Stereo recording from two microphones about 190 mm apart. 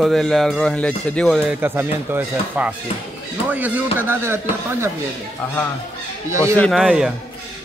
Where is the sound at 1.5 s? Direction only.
10° right (ahead or behind).